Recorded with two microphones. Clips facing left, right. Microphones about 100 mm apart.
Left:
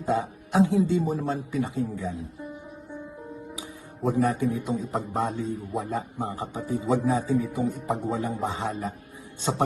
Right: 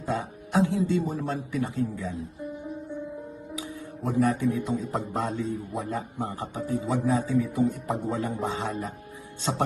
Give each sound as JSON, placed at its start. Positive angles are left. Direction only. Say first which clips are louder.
{"t": 0.0, "sound": "speech", "louder": "left 4 dB", "side_deg": 20}
{"t": 4.0, "sound": "speech", "louder": "even", "side_deg": 25}